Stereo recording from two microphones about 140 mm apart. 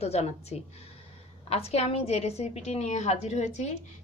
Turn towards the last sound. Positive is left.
turn(degrees=55)  # may be behind; listen again after turning